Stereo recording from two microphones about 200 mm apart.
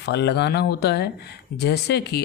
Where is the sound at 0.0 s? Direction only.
55° left (ahead or behind).